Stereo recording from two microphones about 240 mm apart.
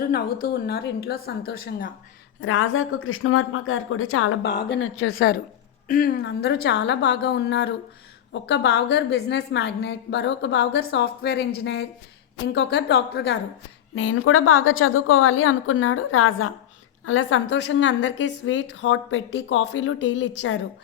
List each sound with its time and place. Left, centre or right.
0.4 s a woman's voice: left
2.4 s a woman's voice: left
5.1 s a woman's voice: left
13.9 s a woman's voice: left